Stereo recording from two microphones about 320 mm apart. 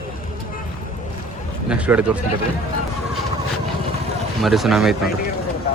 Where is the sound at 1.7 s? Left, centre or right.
Centre.